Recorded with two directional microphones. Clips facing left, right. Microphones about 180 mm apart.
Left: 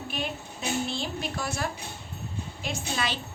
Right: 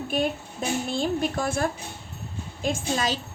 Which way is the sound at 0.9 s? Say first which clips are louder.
Right 7 dB; 50° right (ahead or behind).